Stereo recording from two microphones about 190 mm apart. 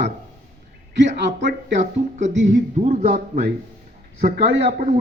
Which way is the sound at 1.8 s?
40° right (ahead or behind).